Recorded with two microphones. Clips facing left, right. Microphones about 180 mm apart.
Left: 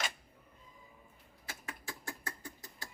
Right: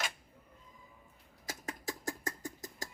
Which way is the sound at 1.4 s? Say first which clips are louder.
Right 6 dB; 40° right (ahead or behind).